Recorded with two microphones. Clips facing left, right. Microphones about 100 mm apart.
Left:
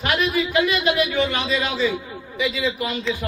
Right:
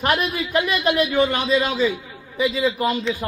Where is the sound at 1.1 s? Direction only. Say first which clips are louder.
Right 3 dB; 45° right (ahead or behind).